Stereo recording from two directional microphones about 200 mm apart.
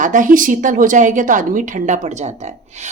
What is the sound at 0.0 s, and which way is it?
A woman's voice, 40° right (ahead or behind).